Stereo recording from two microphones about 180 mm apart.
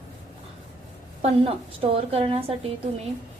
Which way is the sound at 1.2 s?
35° right (ahead or behind).